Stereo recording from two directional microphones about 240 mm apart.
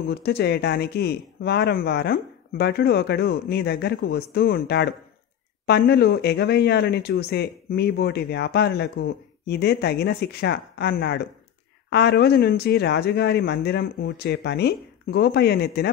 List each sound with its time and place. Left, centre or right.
0.1 s speech: left